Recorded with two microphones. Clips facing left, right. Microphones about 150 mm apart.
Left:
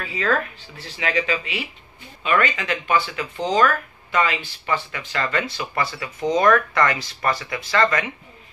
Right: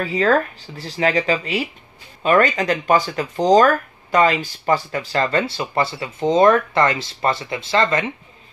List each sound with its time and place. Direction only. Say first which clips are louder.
0.0 s speech: right 6 dB; 40° right (ahead or behind)